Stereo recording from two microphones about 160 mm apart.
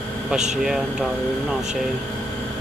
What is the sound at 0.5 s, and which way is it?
Speech, 5° right (ahead or behind).